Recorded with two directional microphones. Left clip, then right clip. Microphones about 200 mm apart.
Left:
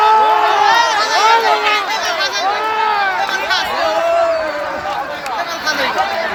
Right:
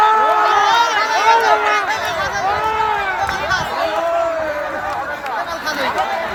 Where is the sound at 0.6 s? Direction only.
50° right (ahead or behind).